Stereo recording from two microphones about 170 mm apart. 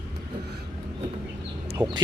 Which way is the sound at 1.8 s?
30° right (ahead or behind).